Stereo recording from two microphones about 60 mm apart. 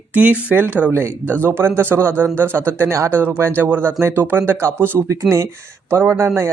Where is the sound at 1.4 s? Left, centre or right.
Right.